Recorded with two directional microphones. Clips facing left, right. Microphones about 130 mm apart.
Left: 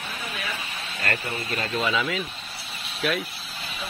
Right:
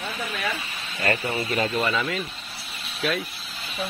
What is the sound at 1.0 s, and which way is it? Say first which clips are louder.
Speech: right 5 dB; 20° right (ahead or behind).